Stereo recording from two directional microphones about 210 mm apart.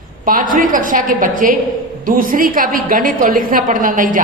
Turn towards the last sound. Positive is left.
turn(degrees=-40)  # may be behind; listen again after turning